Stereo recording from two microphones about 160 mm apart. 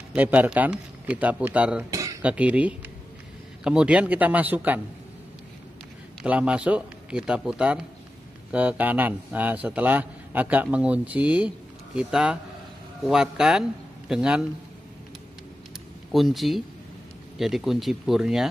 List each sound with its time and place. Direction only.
0.1 s a man's voice: 10° right (ahead or behind)
1.9 s a sound: 20° right (ahead or behind)
2.2 s a man's voice: 10° right (ahead or behind)
6.2 s a man's voice: 5° right (ahead or behind)
16.1 s speech: centre (ahead or behind)